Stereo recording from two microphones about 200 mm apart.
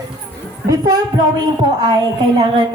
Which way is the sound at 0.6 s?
15° right (ahead or behind).